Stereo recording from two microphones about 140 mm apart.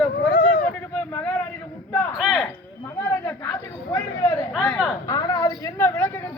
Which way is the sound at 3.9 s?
25° left (ahead or behind).